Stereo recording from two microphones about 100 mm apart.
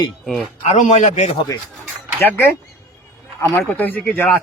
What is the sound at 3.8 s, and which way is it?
Speech, 20° left (ahead or behind).